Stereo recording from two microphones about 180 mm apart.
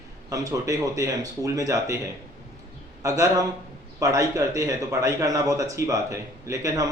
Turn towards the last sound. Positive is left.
turn(degrees=-20)  # may be behind; listen again after turning